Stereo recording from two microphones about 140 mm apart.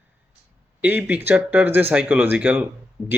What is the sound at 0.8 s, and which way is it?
Speech, 15° right (ahead or behind).